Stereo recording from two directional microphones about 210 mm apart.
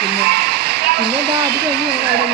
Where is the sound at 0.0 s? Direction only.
50° right (ahead or behind).